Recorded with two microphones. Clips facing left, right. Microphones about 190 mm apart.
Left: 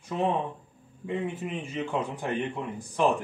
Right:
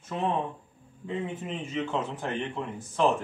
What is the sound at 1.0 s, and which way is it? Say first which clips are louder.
A man's voice: left 2 dB; 10° left (ahead or behind).